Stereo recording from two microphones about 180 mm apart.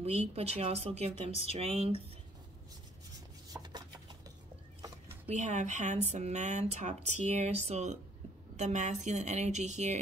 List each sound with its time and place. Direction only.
0.0 s speech: 35° right (ahead or behind)
3.5 s chopping: 25° right (ahead or behind)
5.3 s speech: 40° right (ahead or behind)